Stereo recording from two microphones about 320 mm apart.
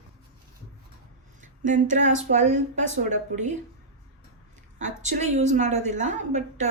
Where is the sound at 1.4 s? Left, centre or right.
Right.